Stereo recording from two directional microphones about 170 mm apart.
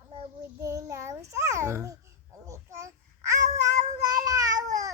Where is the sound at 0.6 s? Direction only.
20° right (ahead or behind).